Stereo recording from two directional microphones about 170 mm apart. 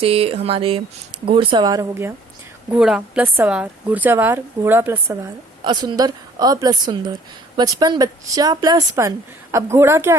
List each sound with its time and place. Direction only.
0.0 s a woman's voice: 35° right (ahead or behind); by 2.1 s 15° right (ahead or behind)
2.6 s a woman's voice: 5° right (ahead or behind)
5.6 s a woman's voice: 25° right (ahead or behind)